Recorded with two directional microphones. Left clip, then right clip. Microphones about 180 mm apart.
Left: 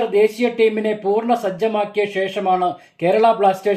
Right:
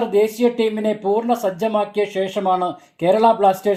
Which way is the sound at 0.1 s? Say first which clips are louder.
Left 1 dB; 45° right (ahead or behind).